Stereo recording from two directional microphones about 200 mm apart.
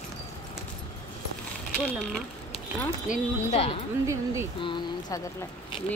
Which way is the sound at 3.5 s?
30° left (ahead or behind).